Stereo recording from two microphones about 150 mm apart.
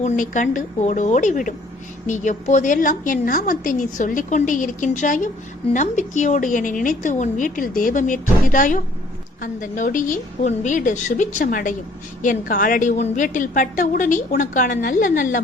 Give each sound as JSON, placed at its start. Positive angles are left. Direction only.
{"t": 0.0, "sound": "a woman's voice", "side_deg": 60}